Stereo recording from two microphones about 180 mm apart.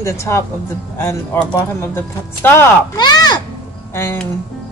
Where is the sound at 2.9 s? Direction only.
20° left (ahead or behind).